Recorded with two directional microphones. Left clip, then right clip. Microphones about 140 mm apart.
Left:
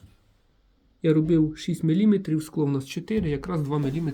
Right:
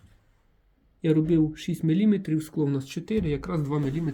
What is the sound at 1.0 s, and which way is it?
Speech, 15° left (ahead or behind).